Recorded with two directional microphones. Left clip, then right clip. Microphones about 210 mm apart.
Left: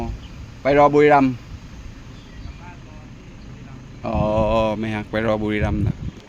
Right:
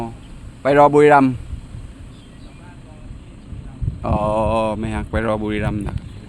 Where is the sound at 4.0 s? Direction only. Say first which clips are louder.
Right 1 dB; 15° right (ahead or behind); by 5.8 s centre (ahead or behind).